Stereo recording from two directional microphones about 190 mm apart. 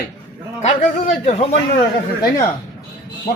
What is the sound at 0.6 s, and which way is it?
Speech, 40° left (ahead or behind).